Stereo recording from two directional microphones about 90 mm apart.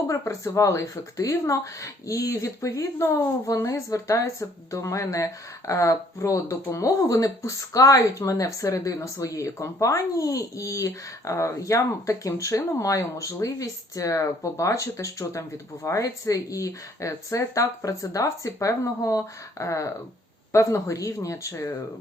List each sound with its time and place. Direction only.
0.1 s speech: 35° left (ahead or behind)